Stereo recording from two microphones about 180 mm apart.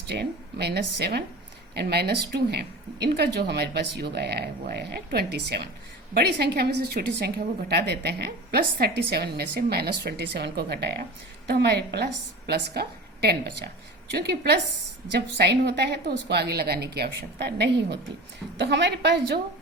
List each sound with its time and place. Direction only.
0.1 s a woman's voice: 65° right (ahead or behind)